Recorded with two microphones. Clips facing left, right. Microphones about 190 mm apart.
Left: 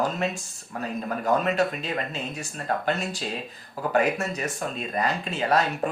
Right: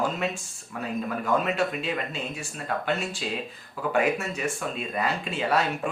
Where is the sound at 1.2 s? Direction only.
40° left (ahead or behind).